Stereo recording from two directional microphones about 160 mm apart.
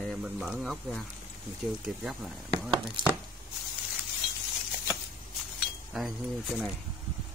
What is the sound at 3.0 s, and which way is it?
Speech, 30° right (ahead or behind).